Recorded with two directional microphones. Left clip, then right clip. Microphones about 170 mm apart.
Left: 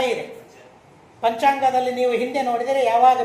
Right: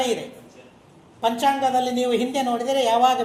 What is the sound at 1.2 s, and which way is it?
A woman's voice, 40° right (ahead or behind).